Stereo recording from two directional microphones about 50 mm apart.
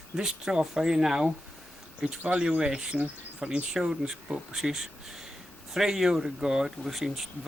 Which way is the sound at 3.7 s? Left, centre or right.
Centre.